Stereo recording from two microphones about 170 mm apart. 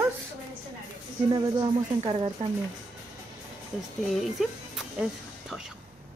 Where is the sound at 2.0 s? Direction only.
35° right (ahead or behind).